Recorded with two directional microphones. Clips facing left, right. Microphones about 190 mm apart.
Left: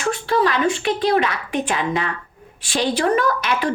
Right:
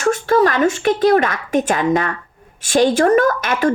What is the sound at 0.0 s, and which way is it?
A woman's voice, 45° right (ahead or behind).